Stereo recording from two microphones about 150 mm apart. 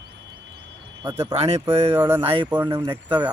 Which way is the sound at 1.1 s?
20° right (ahead or behind).